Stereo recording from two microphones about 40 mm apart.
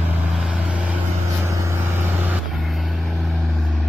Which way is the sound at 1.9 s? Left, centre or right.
Right.